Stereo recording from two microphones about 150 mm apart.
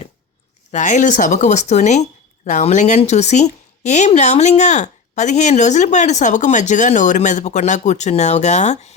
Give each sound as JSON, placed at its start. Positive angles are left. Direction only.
{"t": 0.7, "sound": "speech", "side_deg": 55}